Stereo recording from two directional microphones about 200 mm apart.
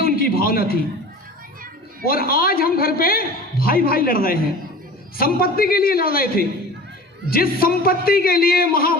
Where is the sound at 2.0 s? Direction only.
45° left (ahead or behind).